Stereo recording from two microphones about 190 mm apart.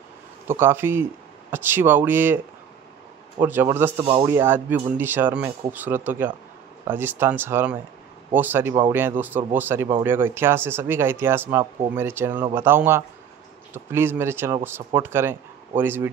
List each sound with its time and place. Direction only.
0.5 s speech: 10° right (ahead or behind)
4.0 s speech: 25° right (ahead or behind)
4.3 s speech: 10° right (ahead or behind)